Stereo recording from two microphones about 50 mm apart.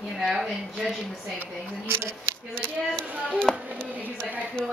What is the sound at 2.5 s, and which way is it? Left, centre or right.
Speech, left.